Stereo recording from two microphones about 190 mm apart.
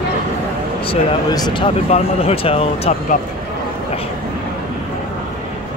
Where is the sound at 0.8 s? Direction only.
25° left (ahead or behind).